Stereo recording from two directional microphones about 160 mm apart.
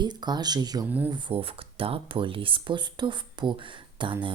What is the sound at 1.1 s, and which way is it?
Speech, 35° right (ahead or behind).